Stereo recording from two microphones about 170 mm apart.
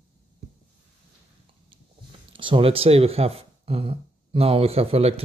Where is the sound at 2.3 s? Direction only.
30° right (ahead or behind).